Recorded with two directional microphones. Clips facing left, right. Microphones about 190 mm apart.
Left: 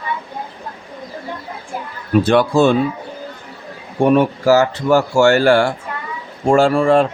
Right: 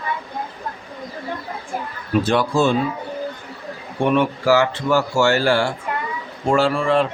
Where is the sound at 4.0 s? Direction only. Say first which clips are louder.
Left 5 dB; 40° left (ahead or behind).